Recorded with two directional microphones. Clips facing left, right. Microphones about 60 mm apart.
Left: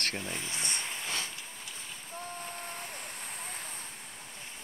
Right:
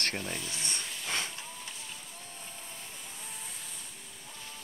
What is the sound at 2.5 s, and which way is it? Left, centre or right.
Vehicle, left.